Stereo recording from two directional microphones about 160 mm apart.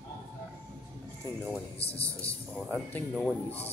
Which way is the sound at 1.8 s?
40° left (ahead or behind).